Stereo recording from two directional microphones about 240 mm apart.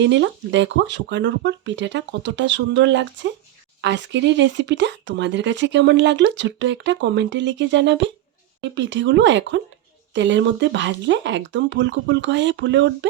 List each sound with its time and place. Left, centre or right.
0.0 s speech: right